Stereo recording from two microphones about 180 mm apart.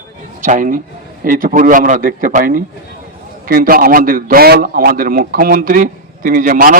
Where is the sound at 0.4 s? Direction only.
45° right (ahead or behind).